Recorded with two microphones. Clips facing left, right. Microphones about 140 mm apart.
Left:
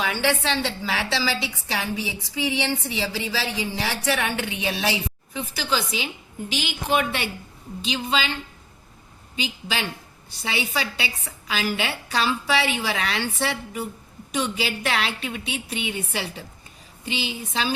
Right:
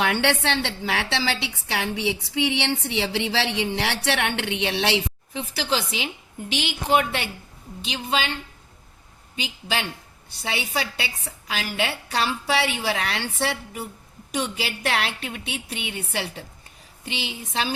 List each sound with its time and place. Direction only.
0.0 s a woman's voice: 65° right (ahead or behind)
9.3 s a woman's voice: 60° right (ahead or behind)